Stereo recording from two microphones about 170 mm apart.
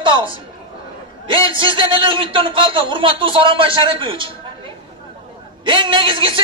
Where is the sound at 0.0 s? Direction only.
30° right (ahead or behind).